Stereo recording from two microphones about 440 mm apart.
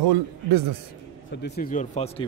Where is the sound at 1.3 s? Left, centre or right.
Left.